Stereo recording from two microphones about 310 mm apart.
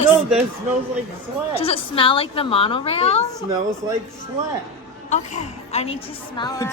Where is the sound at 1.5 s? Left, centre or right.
Centre.